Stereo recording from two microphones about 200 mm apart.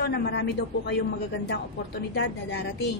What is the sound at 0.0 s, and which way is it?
A woman's voice, 55° left (ahead or behind).